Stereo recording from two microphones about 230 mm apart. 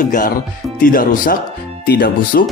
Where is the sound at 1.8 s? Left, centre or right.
Left.